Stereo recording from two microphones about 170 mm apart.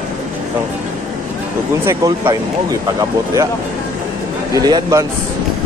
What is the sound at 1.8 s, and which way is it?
Speech, 15° right (ahead or behind).